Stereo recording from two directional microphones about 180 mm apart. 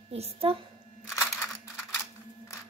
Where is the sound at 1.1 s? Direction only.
10° left (ahead or behind).